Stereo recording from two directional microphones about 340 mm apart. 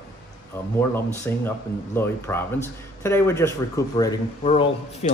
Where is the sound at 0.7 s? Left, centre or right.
Centre.